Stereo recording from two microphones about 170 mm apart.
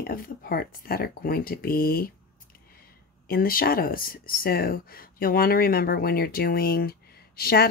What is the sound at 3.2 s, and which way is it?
Speech, 60° left (ahead or behind).